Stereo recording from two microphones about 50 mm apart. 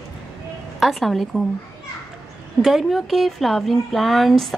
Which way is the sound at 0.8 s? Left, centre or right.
Centre.